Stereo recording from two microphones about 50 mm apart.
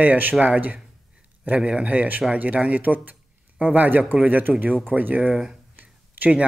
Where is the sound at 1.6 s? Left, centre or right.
Right.